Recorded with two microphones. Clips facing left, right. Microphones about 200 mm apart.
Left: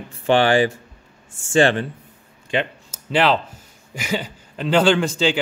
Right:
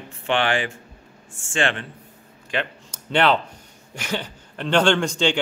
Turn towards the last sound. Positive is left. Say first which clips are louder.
# left 2 dB
turn(degrees=5)  # may be behind; listen again after turning